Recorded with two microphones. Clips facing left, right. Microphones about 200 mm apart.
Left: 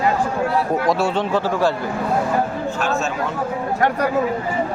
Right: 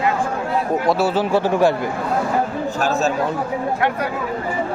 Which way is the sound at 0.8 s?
5° right (ahead or behind).